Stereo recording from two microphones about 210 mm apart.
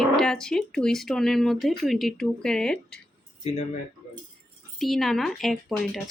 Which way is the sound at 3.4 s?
30° left (ahead or behind).